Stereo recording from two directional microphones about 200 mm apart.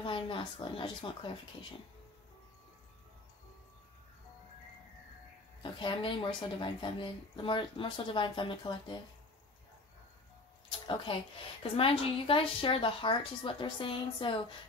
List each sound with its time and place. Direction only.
0.0 s speech: 25° left (ahead or behind)
5.6 s speech: 25° left (ahead or behind)
11.6 s speech: 25° left (ahead or behind)